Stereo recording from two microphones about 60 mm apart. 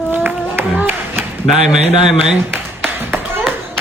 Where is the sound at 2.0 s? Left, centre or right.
Centre.